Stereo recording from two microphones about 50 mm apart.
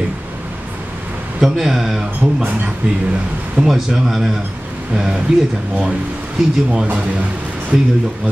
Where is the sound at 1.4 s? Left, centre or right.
Centre.